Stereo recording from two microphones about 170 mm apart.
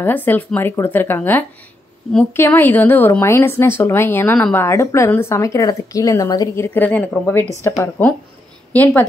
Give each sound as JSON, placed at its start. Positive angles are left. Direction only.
{"t": 0.0, "sound": "a woman's voice", "side_deg": 10}